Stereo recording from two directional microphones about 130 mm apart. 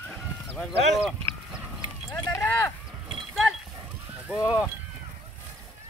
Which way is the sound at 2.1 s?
20° left (ahead or behind).